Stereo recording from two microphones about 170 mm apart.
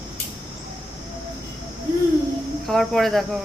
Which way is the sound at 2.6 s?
Centre (ahead or behind).